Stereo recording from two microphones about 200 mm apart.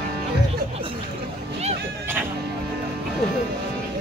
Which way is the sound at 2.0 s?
10° right (ahead or behind).